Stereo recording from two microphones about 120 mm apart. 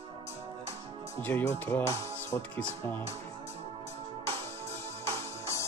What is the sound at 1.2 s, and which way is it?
Speech, 20° left (ahead or behind).